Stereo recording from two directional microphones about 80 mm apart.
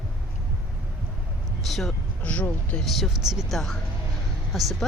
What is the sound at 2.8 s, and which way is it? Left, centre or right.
Speech, centre.